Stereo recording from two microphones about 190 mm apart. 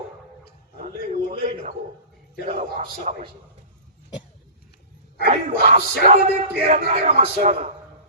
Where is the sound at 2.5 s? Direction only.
35° right (ahead or behind).